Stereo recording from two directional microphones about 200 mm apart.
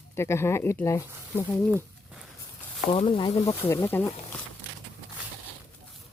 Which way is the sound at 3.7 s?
10° left (ahead or behind).